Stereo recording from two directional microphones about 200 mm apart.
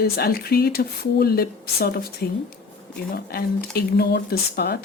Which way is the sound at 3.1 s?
50° left (ahead or behind).